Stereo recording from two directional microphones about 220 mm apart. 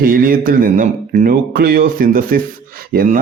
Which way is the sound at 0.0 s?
40° right (ahead or behind).